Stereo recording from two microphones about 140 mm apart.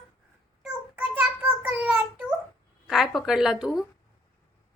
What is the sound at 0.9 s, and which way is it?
Child singing, 10° right (ahead or behind).